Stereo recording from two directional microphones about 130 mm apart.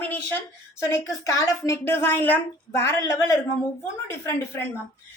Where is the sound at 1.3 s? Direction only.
25° left (ahead or behind).